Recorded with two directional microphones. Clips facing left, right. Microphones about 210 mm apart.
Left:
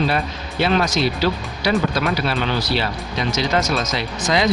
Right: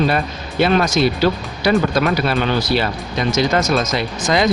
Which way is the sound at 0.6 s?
50° right (ahead or behind).